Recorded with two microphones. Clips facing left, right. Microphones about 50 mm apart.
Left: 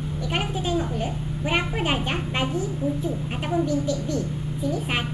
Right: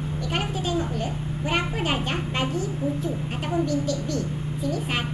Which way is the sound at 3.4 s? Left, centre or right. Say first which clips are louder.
Left 1 dB; centre.